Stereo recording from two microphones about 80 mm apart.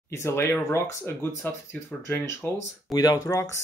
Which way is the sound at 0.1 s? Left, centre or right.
Left.